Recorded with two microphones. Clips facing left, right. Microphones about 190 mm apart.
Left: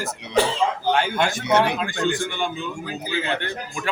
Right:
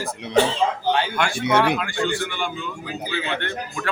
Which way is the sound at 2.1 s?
20° left (ahead or behind).